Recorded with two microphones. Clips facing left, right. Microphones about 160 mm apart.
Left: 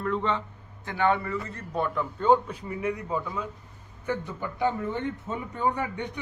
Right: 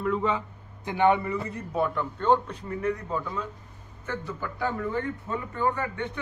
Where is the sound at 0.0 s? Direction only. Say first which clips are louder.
Right 1 dB; 5° right (ahead or behind).